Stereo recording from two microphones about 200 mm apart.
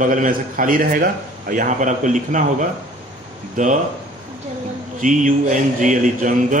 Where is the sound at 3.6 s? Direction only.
40° right (ahead or behind).